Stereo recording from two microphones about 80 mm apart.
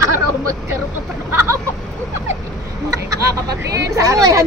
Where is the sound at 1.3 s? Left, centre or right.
Right.